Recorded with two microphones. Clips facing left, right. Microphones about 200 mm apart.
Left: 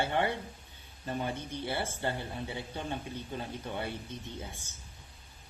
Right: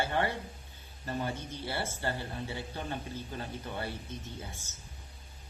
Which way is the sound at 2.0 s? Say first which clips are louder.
Left 1 dB; 20° left (ahead or behind).